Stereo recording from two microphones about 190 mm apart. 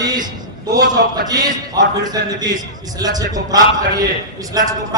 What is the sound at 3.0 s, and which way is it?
A man's voice, 20° right (ahead or behind).